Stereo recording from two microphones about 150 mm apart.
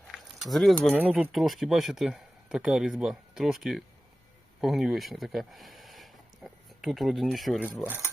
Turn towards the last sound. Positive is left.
turn(degrees=-5)  # may be behind; listen again after turning